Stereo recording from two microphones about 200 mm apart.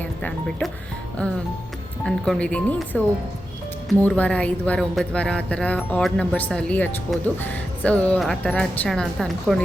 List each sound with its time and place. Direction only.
0.0 s speech: 5° left (ahead or behind)
2.0 s a woman's voice: 5° left (ahead or behind)